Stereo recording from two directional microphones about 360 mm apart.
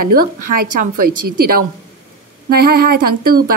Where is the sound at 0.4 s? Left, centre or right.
Right.